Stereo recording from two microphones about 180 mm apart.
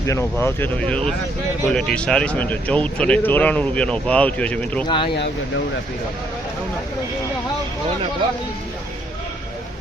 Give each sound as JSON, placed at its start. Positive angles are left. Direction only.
{"t": 0.1, "sound": "speech", "side_deg": 15}
{"t": 4.9, "sound": "speech", "side_deg": 25}